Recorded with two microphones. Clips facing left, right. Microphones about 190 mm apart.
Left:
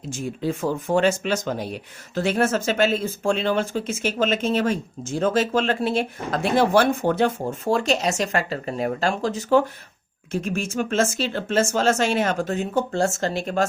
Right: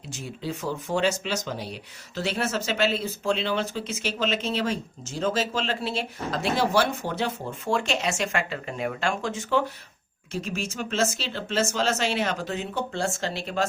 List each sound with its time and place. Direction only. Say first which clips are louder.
0.1 s speech: left 7 dB; 50° left (ahead or behind)
10.3 s speech: left 6 dB; 50° left (ahead or behind)